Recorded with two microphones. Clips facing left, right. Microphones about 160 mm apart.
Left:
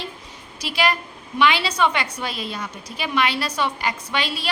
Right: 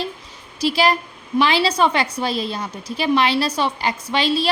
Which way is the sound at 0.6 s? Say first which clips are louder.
Right 5 dB; 30° right (ahead or behind).